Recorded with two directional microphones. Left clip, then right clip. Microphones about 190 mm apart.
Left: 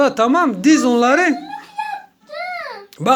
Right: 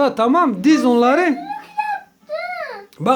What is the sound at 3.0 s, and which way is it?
Speech, 5° left (ahead or behind).